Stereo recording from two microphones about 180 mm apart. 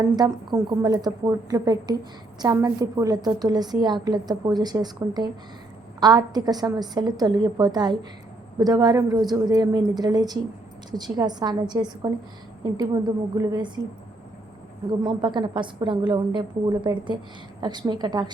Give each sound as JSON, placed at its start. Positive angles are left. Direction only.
{"t": 0.0, "sound": "a woman's voice", "side_deg": -20}
{"t": 15.0, "sound": "a woman's voice", "side_deg": -25}